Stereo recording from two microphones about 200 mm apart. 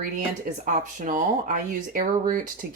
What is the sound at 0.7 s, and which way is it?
Speech, 40° right (ahead or behind).